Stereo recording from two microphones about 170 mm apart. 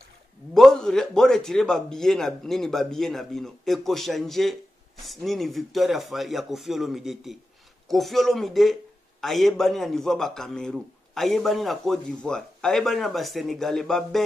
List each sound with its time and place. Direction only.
0.6 s a man's voice: 5° left (ahead or behind)